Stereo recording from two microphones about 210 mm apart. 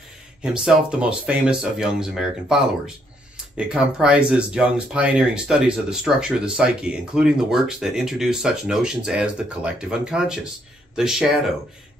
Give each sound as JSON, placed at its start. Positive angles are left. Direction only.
{"t": 0.4, "sound": "speech", "side_deg": -5}